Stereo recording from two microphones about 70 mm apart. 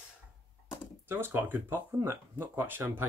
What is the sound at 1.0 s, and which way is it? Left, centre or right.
Speech, right.